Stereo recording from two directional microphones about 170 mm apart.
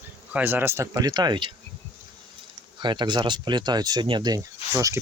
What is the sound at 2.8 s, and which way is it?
Speech, 25° right (ahead or behind).